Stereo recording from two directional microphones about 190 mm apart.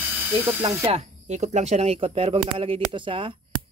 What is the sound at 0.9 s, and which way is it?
Speech, 35° right (ahead or behind).